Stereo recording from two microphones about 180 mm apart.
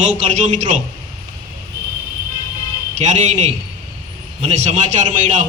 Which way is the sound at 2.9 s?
40° right (ahead or behind).